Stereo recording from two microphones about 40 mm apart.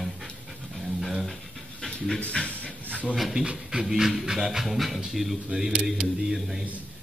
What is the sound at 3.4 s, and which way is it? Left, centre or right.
Speech, right.